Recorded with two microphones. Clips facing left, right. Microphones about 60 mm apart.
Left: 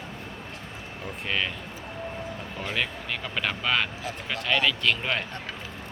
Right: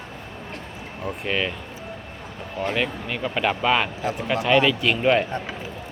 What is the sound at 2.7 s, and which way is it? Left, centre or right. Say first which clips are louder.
Speech: right 3 dB; centre.